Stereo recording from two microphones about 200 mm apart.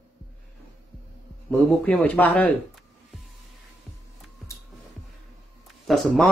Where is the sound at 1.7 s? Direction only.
5° left (ahead or behind).